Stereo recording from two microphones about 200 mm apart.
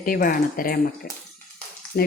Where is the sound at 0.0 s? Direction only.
45° left (ahead or behind).